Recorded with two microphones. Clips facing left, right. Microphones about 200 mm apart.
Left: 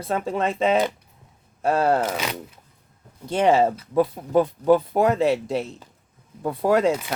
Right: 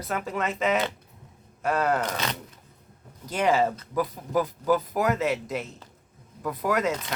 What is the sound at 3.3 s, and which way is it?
Speech, 30° left (ahead or behind).